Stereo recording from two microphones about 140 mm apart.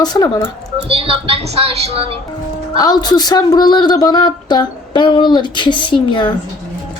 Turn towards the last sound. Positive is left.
turn(degrees=35)  # may be behind; listen again after turning